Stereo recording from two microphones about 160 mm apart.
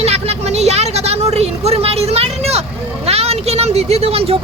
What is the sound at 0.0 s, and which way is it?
Vehicle, 40° right (ahead or behind).